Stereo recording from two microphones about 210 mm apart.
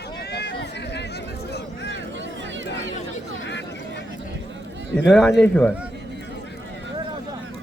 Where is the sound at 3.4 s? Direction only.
55° left (ahead or behind).